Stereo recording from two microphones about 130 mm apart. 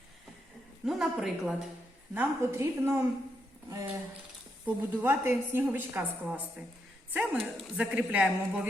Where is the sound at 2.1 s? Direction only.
20° right (ahead or behind).